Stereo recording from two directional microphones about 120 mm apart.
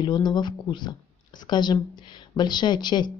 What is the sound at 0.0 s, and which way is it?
A woman's voice, 40° left (ahead or behind).